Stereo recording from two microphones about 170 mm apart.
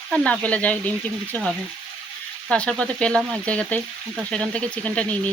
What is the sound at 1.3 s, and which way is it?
Speech, centre (ahead or behind).